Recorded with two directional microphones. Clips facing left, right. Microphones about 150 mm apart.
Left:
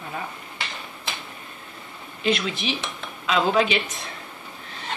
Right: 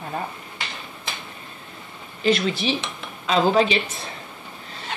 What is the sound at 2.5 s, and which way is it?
Speech, 35° right (ahead or behind).